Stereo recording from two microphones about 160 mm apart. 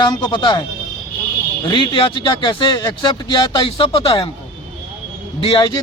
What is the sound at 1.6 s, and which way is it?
Speech, 30° left (ahead or behind).